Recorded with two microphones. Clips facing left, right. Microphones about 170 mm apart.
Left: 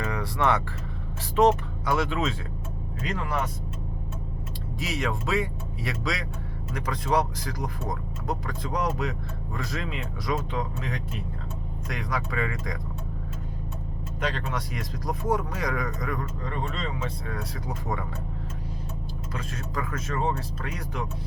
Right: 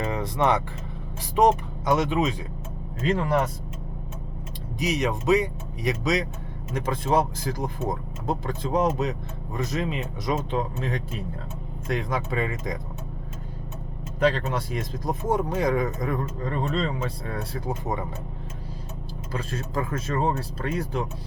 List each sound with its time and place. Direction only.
0.0 s vehicle: 20° right (ahead or behind)
1.4 s speech: 20° right (ahead or behind)
3.0 s speech: 30° right (ahead or behind)
4.8 s speech: 20° right (ahead or behind)
14.2 s speech: 35° right (ahead or behind)
16.4 s speech: 40° right (ahead or behind)
19.3 s speech: 30° right (ahead or behind)